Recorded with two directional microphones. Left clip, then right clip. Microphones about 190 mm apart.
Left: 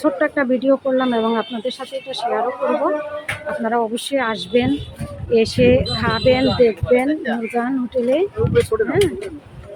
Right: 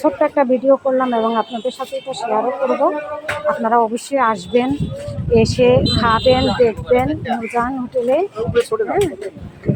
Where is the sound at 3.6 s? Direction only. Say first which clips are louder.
Right 3 dB; 10° left (ahead or behind).